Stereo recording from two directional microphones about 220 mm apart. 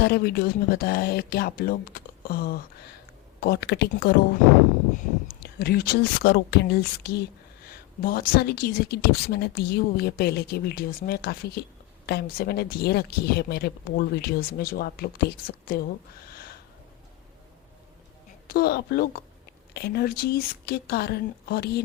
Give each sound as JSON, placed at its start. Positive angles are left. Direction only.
{"t": 0.0, "sound": "speech", "side_deg": 45}
{"t": 16.2, "sound": "a sound", "side_deg": 45}
{"t": 18.4, "sound": "speech", "side_deg": 40}